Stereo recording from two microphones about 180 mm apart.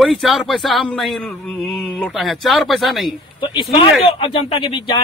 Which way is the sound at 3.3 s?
25° left (ahead or behind).